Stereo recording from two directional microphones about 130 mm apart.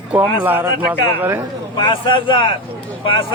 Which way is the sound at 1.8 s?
40° left (ahead or behind).